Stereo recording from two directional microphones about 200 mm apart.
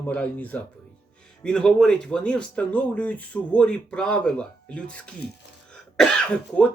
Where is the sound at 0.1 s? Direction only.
10° left (ahead or behind).